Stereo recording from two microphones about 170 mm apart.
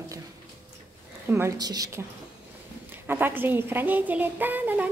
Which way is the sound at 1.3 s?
15° right (ahead or behind).